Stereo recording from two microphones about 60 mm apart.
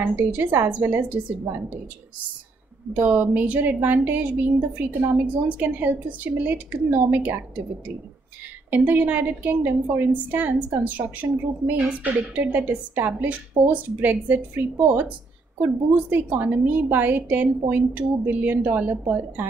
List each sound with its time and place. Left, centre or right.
0.0 s a woman's voice: right
2.9 s a woman's voice: right
8.6 s a woman's voice: right
16.1 s a woman's voice: right